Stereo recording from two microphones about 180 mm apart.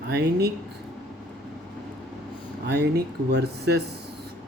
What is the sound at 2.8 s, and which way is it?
Speech, 65° right (ahead or behind).